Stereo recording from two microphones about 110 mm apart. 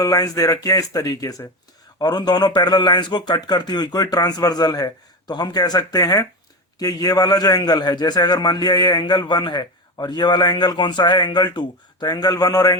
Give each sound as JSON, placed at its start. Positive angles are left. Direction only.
{"t": 0.0, "sound": "a man's voice", "side_deg": 35}